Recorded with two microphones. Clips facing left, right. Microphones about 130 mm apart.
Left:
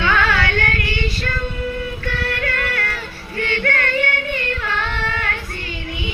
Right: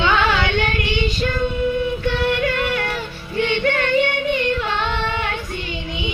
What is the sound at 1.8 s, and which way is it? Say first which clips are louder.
Music: right 5 dB; 15° right (ahead or behind).